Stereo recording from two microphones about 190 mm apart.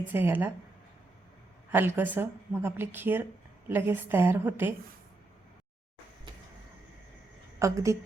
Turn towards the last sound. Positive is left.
turn(degrees=-15)  # may be behind; listen again after turning